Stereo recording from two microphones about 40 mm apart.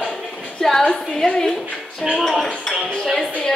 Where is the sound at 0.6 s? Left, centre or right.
Centre.